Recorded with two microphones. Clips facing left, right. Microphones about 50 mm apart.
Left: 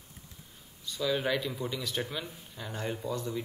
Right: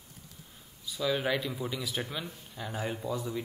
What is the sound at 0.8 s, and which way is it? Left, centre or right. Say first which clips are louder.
Speech: even; centre.